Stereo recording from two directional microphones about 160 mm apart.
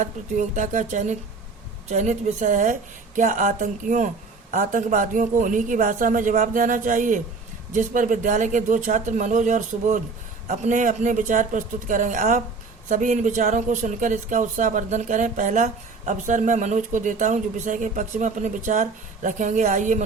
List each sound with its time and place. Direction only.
0.0 s speech: 50° right (ahead or behind)